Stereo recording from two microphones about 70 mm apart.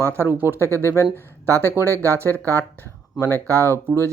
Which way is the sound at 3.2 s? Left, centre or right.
Left.